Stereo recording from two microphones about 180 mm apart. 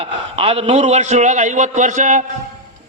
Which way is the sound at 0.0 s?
30° right (ahead or behind).